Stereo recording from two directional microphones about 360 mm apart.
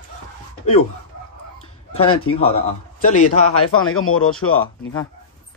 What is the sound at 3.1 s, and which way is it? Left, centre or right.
Speech, left.